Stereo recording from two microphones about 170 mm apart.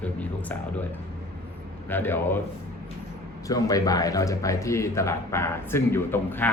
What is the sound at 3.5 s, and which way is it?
Speech, 20° left (ahead or behind).